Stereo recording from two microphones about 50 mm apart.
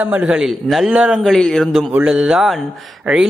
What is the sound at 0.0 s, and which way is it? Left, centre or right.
Speech, right.